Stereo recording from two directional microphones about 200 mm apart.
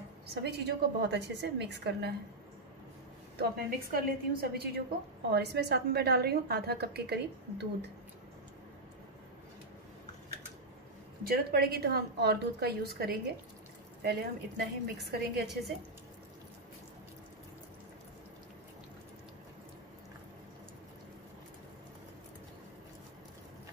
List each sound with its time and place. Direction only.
0.3 s a woman's voice: 55° right (ahead or behind)
3.3 s a woman's voice: 50° right (ahead or behind)
11.2 s a woman's voice: 50° right (ahead or behind)